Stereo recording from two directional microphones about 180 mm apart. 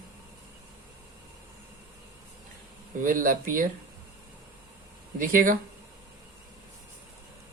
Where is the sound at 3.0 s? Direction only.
50° right (ahead or behind).